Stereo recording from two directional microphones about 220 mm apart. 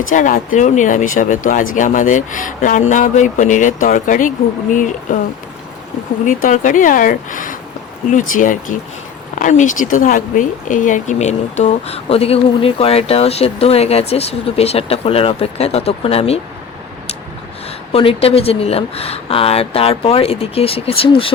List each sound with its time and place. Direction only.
0.1 s speech: 35° left (ahead or behind)
6.2 s speech: 35° left (ahead or behind)
17.9 s speech: 25° left (ahead or behind)